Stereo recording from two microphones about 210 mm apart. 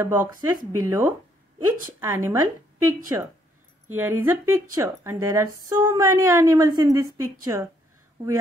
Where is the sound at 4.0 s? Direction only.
10° right (ahead or behind).